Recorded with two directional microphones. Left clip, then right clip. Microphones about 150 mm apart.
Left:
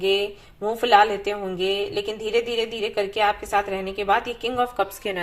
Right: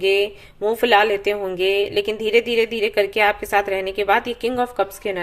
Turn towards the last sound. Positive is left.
turn(degrees=-25)  # may be behind; listen again after turning